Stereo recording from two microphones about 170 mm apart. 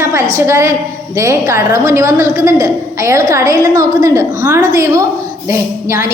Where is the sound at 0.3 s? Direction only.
15° right (ahead or behind).